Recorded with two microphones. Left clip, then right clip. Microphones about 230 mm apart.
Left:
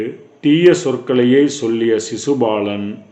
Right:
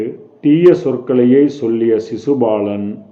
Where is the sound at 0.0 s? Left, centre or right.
Centre.